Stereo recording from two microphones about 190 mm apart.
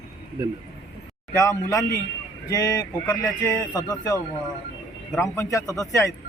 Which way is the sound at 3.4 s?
20° left (ahead or behind).